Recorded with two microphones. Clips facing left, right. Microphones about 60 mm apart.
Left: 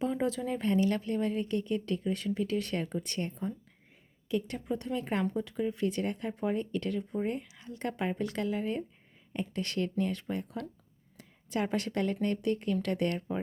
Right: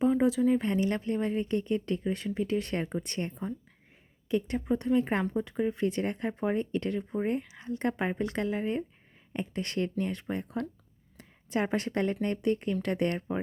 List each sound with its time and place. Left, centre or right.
0.1 s speech: centre
0.7 s speech: right